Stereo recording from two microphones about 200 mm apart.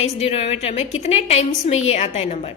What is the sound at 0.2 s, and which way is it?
A woman's voice, 30° left (ahead or behind).